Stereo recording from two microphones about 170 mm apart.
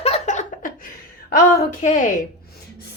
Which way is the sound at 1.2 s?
65° left (ahead or behind).